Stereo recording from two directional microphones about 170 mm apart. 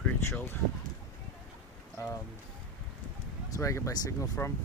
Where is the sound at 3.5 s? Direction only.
15° left (ahead or behind).